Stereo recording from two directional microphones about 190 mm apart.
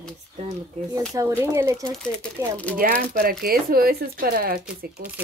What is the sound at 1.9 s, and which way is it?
Speech, 5° left (ahead or behind).